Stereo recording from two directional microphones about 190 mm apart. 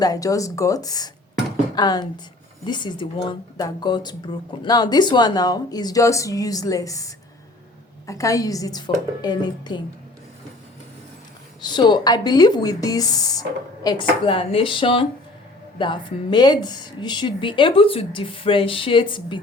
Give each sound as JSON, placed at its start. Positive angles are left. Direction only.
{"t": 0.0, "sound": "speech", "side_deg": 20}
{"t": 11.6, "sound": "speech", "side_deg": 25}